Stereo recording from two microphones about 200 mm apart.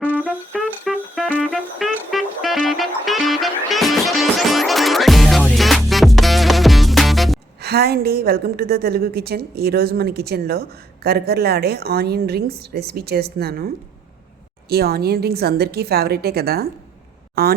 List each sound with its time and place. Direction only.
0.5 s music: centre (ahead or behind)
7.6 s a woman's voice: 55° right (ahead or behind)
14.7 s a woman's voice: 50° right (ahead or behind)